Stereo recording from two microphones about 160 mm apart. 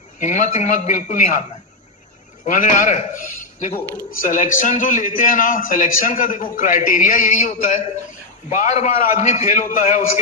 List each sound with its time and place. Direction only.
0.2 s a man's voice: 50° left (ahead or behind)
2.5 s a man's voice: 55° left (ahead or behind)